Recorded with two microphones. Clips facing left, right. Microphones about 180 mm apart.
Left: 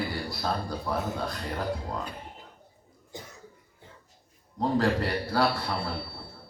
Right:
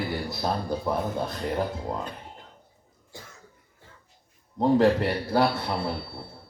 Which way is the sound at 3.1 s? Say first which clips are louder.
Left 3 dB; 20° left (ahead or behind).